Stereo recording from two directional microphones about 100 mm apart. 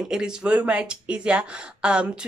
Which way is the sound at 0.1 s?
10° right (ahead or behind).